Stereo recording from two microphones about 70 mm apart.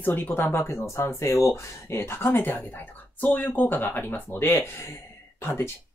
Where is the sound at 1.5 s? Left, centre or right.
Left.